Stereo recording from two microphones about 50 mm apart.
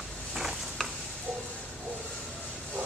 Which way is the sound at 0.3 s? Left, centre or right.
Centre.